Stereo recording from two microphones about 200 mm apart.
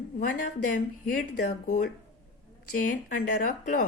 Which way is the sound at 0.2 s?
40° left (ahead or behind).